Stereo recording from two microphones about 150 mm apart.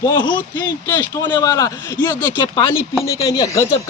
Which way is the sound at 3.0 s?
20° left (ahead or behind).